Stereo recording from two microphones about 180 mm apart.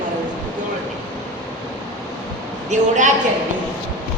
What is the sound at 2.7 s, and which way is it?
Speech, 45° right (ahead or behind).